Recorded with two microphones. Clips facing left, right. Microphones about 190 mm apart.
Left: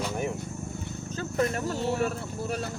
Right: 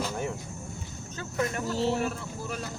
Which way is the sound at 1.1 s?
35° left (ahead or behind).